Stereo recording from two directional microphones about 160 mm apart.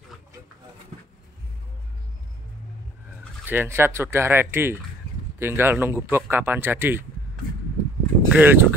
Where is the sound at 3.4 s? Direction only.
15° right (ahead or behind).